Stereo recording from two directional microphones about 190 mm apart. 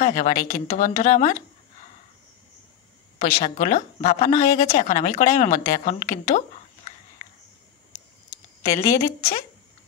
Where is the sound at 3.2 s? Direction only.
35° left (ahead or behind).